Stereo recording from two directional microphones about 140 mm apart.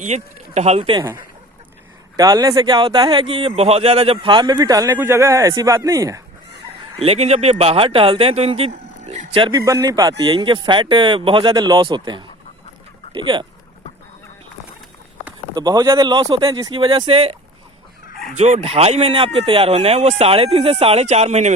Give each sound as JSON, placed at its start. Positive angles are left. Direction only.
{"t": 0.0, "sound": "speech", "side_deg": -55}
{"t": 2.1, "sound": "speech", "side_deg": -25}
{"t": 7.0, "sound": "speech", "side_deg": -45}
{"t": 9.4, "sound": "speech", "side_deg": -30}
{"t": 10.2, "sound": "speech", "side_deg": -40}
{"t": 15.5, "sound": "speech", "side_deg": -30}
{"t": 18.3, "sound": "speech", "side_deg": -55}